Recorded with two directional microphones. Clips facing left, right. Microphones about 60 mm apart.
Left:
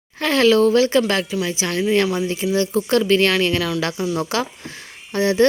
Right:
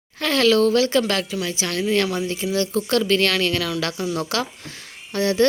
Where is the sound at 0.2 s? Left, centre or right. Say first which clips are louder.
Left 2 dB; left.